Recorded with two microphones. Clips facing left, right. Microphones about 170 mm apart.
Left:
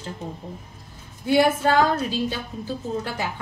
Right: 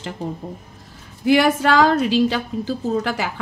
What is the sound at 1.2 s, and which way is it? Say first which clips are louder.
A woman's voice: right 3 dB; 90° right.